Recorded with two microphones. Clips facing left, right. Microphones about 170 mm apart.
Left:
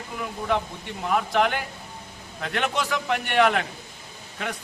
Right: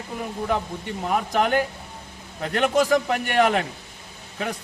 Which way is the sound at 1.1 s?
40° right (ahead or behind).